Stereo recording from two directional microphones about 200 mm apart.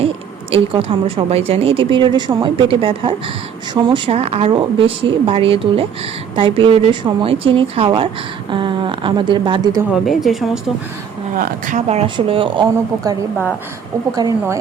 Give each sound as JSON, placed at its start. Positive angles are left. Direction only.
{"t": 0.5, "sound": "speech", "side_deg": -30}
{"t": 9.9, "sound": "speech", "side_deg": 0}
{"t": 11.3, "sound": "speech", "side_deg": -45}